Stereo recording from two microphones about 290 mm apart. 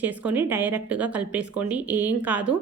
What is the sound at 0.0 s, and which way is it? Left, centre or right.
Speech, centre.